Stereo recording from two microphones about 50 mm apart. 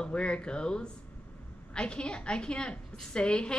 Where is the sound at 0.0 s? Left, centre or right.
Left.